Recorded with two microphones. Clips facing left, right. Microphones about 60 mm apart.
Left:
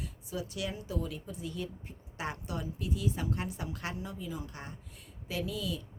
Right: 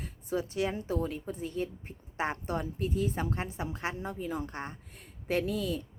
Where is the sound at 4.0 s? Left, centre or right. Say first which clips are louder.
Right 5 dB; right.